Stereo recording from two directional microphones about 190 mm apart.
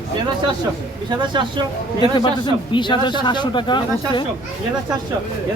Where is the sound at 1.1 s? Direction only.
25° right (ahead or behind).